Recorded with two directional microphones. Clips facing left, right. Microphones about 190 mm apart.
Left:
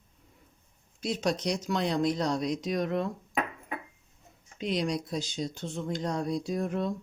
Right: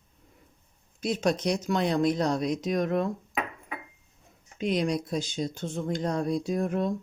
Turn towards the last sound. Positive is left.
turn(degrees=-50)  # may be behind; listen again after turning